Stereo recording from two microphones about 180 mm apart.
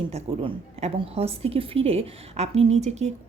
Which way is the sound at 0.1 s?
35° right (ahead or behind).